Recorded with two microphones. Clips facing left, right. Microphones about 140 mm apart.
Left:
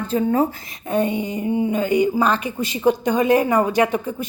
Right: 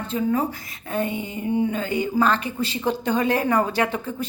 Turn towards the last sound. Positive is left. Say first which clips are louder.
# left 5 dB
turn(degrees=15)  # may be behind; listen again after turning